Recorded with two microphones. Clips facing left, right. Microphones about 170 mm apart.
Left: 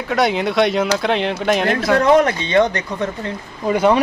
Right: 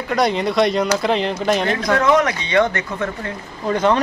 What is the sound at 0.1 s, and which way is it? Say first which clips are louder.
Speech: left 1 dB; centre (ahead or behind).